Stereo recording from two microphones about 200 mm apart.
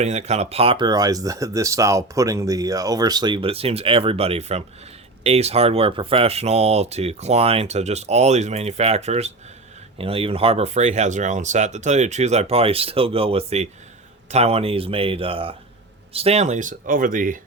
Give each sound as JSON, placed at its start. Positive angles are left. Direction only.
{"t": 0.0, "sound": "speech", "side_deg": -35}